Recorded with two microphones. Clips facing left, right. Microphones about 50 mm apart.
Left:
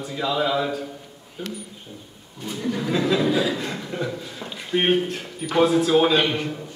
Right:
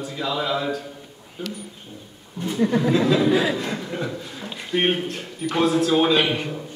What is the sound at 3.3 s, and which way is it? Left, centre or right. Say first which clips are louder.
Speech: right 2 dB; right.